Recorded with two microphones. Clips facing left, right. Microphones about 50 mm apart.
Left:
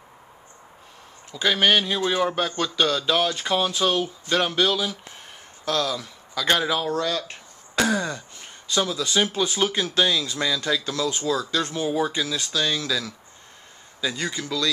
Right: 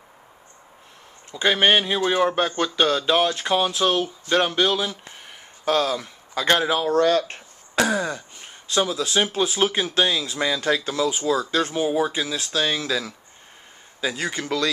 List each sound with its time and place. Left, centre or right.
1.3 s speech: centre
5.7 s a man's voice: right
6.5 s speech: centre
6.9 s speech: right
7.7 s a sound: centre
9.0 s speech: centre
10.5 s speech: right
10.8 s speech: centre
14.3 s speech: right